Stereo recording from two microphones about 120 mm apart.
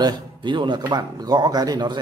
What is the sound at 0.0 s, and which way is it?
Speech, 40° right (ahead or behind).